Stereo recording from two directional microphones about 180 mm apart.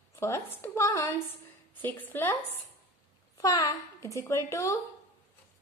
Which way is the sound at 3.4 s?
20° left (ahead or behind).